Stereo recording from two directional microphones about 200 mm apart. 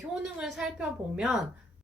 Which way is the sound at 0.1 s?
Centre (ahead or behind).